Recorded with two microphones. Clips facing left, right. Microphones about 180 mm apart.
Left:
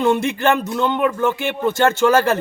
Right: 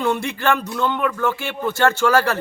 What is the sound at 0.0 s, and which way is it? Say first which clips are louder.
Speech: left 4 dB; 20° left (ahead or behind).